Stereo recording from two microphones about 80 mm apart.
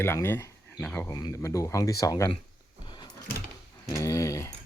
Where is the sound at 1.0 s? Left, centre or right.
Left.